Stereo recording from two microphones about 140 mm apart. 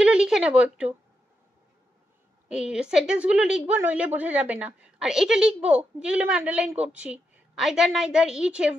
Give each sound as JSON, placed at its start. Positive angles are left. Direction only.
{"t": 0.0, "sound": "speech", "side_deg": -5}
{"t": 2.4, "sound": "a woman's voice", "side_deg": -5}